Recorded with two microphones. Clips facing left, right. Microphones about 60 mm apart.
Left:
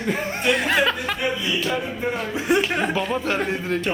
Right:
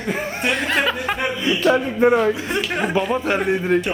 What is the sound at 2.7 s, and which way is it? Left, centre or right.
A man's voice, centre.